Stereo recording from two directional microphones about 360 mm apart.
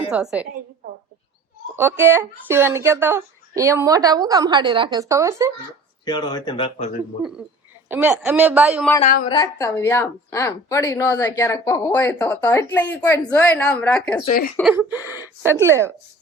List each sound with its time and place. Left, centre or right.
0.1 s a woman's voice: centre
0.8 s bird: right
1.7 s speech: centre
6.1 s a woman's voice: centre
7.9 s a woman's voice: centre
9.0 s a woman's voice: left
9.3 s a woman's voice: centre
14.3 s a woman's voice: left
14.5 s a woman's voice: centre